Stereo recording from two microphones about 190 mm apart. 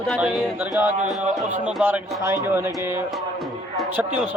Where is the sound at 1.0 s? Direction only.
40° right (ahead or behind).